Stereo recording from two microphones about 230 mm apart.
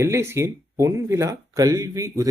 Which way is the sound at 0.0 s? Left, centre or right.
Centre.